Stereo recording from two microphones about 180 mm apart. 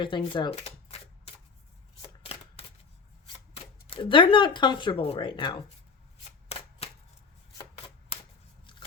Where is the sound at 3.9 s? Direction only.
30° left (ahead or behind).